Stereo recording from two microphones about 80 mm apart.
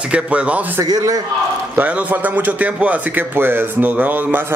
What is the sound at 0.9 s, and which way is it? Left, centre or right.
Speech, right.